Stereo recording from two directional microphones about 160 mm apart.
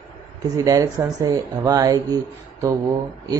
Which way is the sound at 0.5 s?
20° right (ahead or behind).